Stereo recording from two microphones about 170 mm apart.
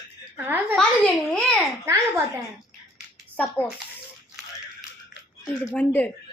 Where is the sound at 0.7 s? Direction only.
5° left (ahead or behind).